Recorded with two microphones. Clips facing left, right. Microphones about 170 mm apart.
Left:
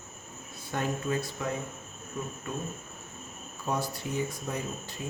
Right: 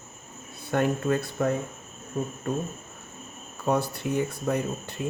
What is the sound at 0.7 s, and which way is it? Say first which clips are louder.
Speech: right 6 dB; 60° right (ahead or behind).